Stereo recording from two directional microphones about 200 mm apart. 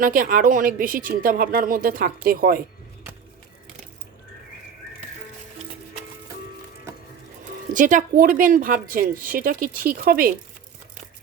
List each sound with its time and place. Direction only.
0.0 s speech: 45° right (ahead or behind)
7.7 s speech: 40° right (ahead or behind)